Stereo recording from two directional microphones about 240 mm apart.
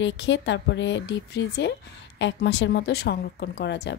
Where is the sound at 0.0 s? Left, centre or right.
Left.